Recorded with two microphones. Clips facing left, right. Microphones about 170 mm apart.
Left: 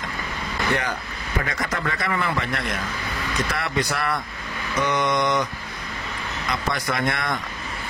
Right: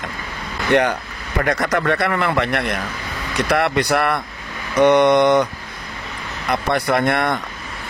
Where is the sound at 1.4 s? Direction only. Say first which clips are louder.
Right 13 dB; 70° right (ahead or behind).